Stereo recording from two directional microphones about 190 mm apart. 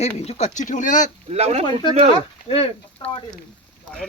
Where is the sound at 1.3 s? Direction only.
35° right (ahead or behind).